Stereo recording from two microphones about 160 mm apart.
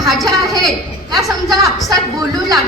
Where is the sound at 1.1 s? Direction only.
25° right (ahead or behind).